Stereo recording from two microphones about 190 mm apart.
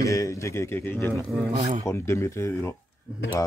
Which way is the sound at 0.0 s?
15° left (ahead or behind).